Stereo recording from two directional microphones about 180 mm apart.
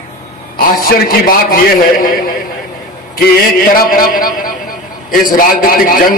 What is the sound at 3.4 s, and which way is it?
A man's voice, 50° left (ahead or behind).